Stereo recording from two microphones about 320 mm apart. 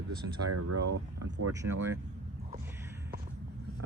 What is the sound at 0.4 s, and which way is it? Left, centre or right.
Speech, right.